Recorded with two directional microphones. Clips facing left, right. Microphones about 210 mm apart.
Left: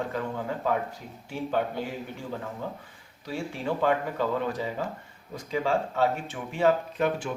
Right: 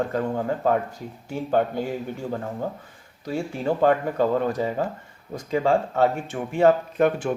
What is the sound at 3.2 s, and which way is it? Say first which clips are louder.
Speech: right 6 dB; 45° right (ahead or behind).